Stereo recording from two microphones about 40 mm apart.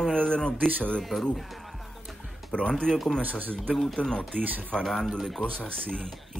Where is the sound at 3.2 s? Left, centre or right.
Right.